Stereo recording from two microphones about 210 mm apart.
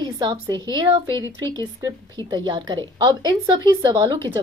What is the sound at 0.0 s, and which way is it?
A woman's voice, 20° right (ahead or behind).